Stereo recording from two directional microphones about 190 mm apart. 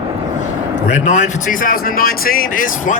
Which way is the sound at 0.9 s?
40° left (ahead or behind).